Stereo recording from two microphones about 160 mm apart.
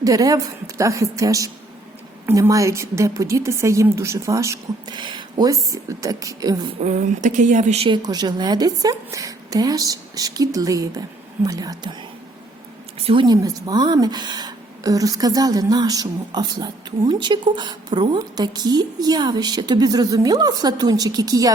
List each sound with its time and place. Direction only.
0.0 s a woman's voice: 20° right (ahead or behind)
6.7 s speech: 50° right (ahead or behind)
7.9 s a woman's voice: 25° right (ahead or behind)
13.0 s speech: 35° right (ahead or behind)
13.2 s a woman's voice: 25° right (ahead or behind)